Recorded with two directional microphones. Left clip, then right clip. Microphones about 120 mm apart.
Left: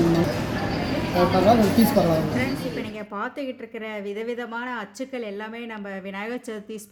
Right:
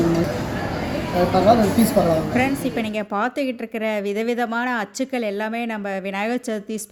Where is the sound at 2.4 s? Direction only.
90° right.